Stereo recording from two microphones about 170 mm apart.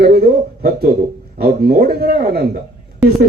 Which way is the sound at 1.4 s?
65° right (ahead or behind).